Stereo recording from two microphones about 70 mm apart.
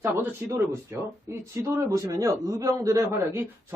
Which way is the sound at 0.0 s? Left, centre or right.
Right.